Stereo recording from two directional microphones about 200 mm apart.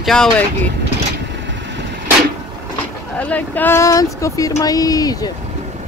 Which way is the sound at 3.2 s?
5° left (ahead or behind).